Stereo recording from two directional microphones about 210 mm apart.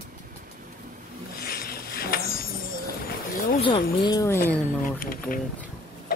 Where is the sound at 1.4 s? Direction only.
45° left (ahead or behind).